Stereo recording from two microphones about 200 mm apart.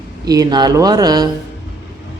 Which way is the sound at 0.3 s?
20° right (ahead or behind).